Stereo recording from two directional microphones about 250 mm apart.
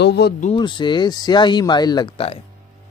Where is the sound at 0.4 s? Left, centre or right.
Left.